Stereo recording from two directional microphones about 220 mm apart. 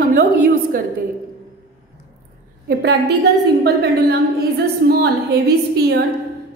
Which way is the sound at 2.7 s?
50° right (ahead or behind).